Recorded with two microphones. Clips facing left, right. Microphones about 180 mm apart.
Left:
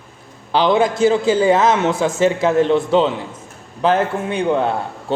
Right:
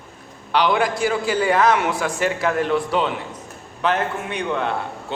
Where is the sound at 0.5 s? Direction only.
25° left (ahead or behind).